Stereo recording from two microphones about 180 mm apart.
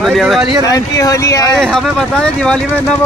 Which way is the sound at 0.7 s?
20° left (ahead or behind).